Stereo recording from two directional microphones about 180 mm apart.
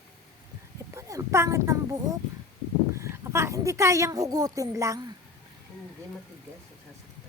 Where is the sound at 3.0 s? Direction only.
15° right (ahead or behind).